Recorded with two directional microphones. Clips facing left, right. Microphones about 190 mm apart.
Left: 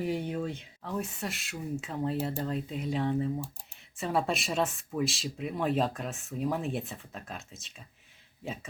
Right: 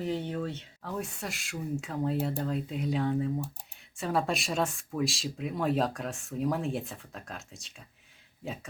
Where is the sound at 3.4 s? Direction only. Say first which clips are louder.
Right 3 dB; 65° right (ahead or behind).